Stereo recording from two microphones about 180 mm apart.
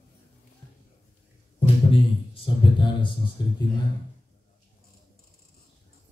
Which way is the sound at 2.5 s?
25° left (ahead or behind).